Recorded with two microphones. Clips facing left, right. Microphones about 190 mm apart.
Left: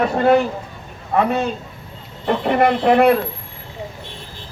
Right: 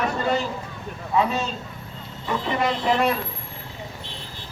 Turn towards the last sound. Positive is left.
turn(degrees=60)  # may be behind; listen again after turning